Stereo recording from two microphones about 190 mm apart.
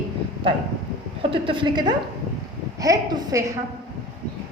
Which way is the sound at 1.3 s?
25° right (ahead or behind).